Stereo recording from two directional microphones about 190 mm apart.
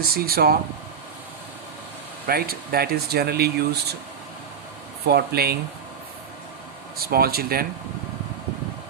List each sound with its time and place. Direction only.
0.0 s speech: 50° right (ahead or behind)
2.2 s speech: 55° right (ahead or behind)
5.0 s speech: 55° right (ahead or behind)
6.9 s speech: 55° right (ahead or behind)